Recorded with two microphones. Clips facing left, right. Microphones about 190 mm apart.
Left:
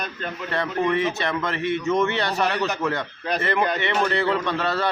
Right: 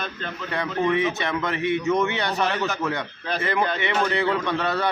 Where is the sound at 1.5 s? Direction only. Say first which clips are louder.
Right 1 dB; 15° right (ahead or behind).